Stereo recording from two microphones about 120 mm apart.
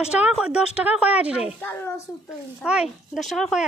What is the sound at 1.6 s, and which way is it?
Speech, 20° left (ahead or behind).